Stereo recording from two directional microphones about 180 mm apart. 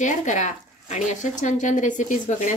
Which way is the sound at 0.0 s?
45° left (ahead or behind).